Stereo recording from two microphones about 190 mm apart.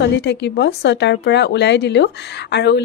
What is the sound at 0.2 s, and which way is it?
Speech, 65° left (ahead or behind).